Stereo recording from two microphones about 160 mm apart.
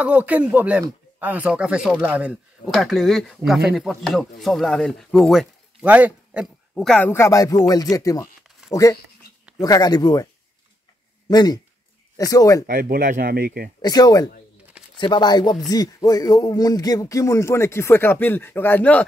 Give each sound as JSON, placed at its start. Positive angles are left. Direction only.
{"t": 0.0, "sound": "speech", "side_deg": -10}
{"t": 7.1, "sound": "speech", "side_deg": 15}
{"t": 9.6, "sound": "speech", "side_deg": 25}
{"t": 11.2, "sound": "speech", "side_deg": 25}
{"t": 12.6, "sound": "speech", "side_deg": -60}
{"t": 13.7, "sound": "speech", "side_deg": 25}